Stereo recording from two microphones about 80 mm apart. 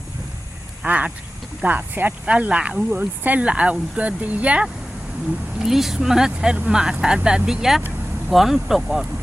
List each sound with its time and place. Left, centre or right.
0.8 s speech: centre
5.5 s speech: centre